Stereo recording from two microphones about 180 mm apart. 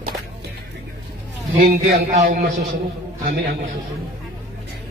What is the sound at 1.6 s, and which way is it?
Speech, 50° right (ahead or behind).